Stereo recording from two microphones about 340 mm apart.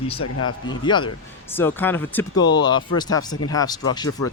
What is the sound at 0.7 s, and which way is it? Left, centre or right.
Speech, centre.